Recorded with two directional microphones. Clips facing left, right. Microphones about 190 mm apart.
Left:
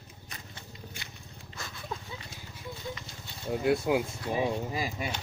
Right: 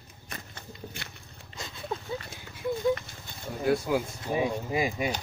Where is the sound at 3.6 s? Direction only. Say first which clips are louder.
Right 1 dB; 20° left (ahead or behind).